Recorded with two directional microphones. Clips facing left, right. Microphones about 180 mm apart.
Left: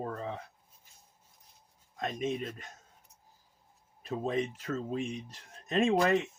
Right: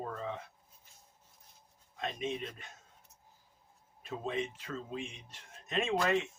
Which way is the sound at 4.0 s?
40° left (ahead or behind).